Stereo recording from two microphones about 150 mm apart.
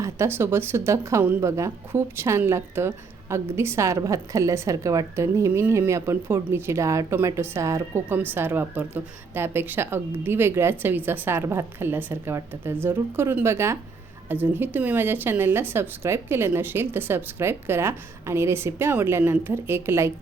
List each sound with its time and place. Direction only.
0.0 s speech: 15° right (ahead or behind)